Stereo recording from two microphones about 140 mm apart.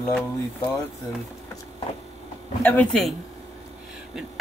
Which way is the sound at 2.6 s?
15° left (ahead or behind).